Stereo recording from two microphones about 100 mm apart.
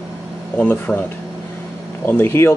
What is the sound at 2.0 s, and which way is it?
Speech, 20° left (ahead or behind).